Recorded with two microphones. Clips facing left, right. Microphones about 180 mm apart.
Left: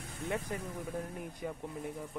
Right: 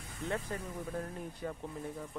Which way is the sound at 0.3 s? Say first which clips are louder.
Left 1 dB; 15° left (ahead or behind).